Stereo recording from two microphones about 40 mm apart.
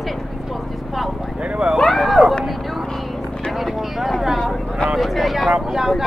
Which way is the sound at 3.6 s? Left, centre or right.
Centre.